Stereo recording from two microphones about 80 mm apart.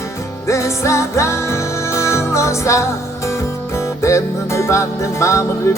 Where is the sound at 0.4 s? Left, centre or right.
Left.